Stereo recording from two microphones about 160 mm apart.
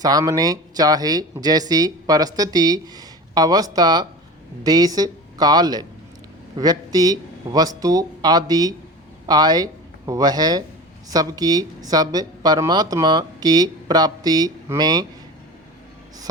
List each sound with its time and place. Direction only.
0.0 s speech: 25° right (ahead or behind)